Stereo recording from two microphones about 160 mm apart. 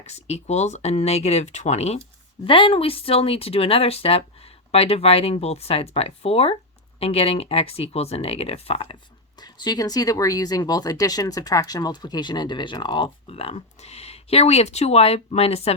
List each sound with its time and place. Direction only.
0.0 s speech: 40° left (ahead or behind)
9.4 s speech: 25° left (ahead or behind)